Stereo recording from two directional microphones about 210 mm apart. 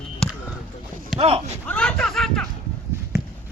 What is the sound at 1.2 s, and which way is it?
Speech, 30° right (ahead or behind).